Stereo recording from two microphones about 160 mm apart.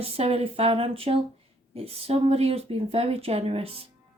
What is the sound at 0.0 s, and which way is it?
Speech, 40° right (ahead or behind).